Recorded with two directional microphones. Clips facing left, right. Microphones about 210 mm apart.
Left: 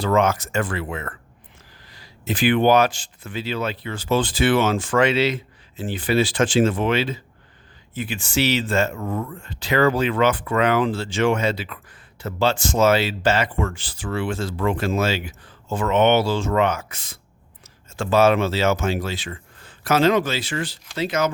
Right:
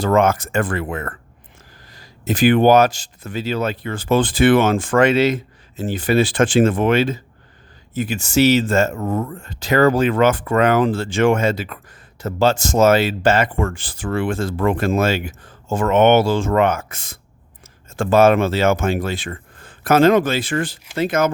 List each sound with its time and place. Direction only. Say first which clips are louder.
0.0 s speech: right 3 dB; 50° right (ahead or behind)